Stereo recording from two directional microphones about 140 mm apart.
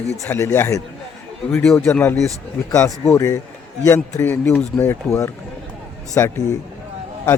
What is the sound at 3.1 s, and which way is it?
Speech, 25° left (ahead or behind).